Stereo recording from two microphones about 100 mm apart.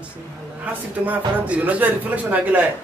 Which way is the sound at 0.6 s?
15° right (ahead or behind).